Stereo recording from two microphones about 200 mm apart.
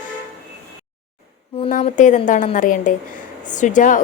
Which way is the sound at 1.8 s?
35° left (ahead or behind).